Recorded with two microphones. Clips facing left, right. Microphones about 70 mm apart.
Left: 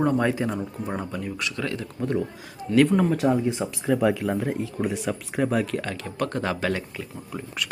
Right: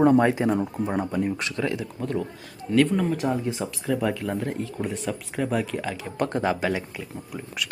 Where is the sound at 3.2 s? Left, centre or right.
Centre.